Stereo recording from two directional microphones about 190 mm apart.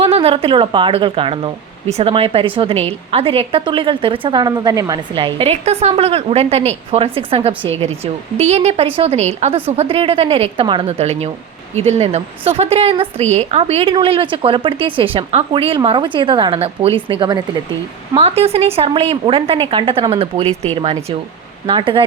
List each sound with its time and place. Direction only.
0.0 s a woman's voice: 30° right (ahead or behind)